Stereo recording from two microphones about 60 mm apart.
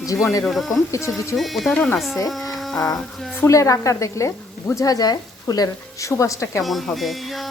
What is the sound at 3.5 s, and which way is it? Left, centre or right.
Speech, left.